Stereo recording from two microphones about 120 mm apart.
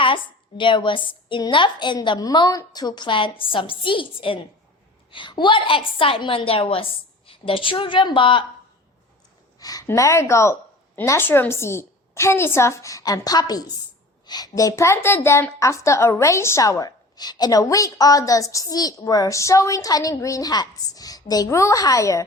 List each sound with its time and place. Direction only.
0.0 s a woman's voice: 45° left (ahead or behind)
9.6 s a woman's voice: 30° left (ahead or behind)